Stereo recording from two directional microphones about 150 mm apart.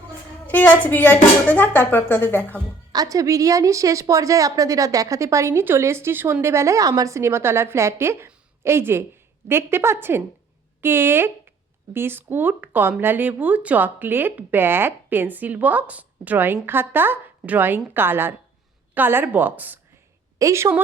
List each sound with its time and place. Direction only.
0.4 s speech: 10° left (ahead or behind)
2.9 s a woman's voice: 25° right (ahead or behind)